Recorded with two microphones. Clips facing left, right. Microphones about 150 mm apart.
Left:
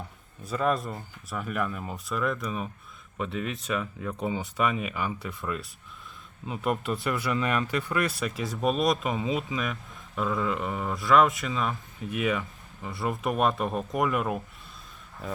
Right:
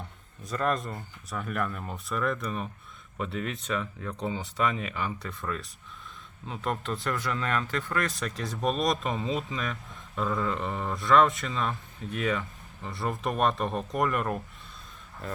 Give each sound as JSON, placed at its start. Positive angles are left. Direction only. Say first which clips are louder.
{"t": 0.4, "sound": "speech", "louder": "left 2 dB", "side_deg": 5}